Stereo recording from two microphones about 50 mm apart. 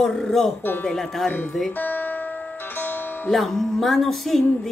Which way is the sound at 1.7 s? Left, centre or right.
Left.